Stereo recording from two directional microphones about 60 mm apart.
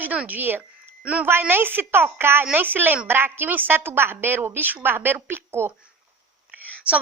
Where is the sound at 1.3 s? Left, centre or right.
Right.